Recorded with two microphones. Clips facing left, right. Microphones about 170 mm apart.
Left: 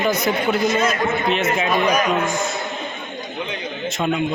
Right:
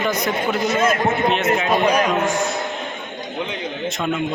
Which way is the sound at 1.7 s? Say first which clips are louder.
Right 1 dB; 30° right (ahead or behind).